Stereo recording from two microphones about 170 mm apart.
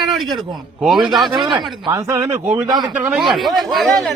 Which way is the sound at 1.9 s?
20° right (ahead or behind).